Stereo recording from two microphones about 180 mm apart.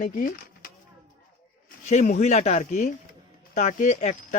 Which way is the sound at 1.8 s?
40° left (ahead or behind).